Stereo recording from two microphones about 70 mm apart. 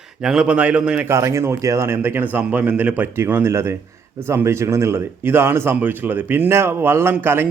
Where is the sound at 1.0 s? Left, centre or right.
Right.